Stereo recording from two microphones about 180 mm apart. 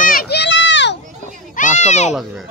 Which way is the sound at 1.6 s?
40° left (ahead or behind).